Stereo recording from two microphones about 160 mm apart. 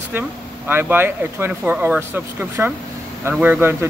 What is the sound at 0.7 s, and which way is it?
Speech, 15° right (ahead or behind).